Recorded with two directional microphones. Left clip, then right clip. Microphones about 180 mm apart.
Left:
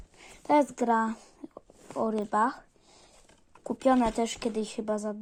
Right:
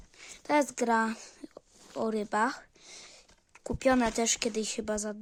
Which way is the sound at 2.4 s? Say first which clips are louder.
Left 3 dB; 50° right (ahead or behind).